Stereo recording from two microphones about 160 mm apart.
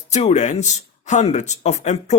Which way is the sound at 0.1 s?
45° left (ahead or behind).